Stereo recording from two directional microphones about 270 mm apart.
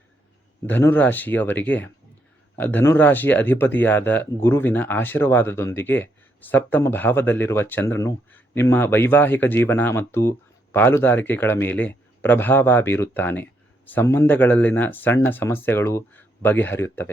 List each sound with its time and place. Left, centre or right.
0.7 s speech: centre